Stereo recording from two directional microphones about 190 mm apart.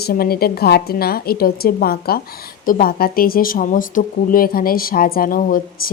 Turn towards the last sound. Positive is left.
turn(degrees=50)  # may be behind; listen again after turning